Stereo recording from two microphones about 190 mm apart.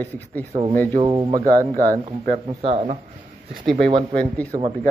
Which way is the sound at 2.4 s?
30° right (ahead or behind).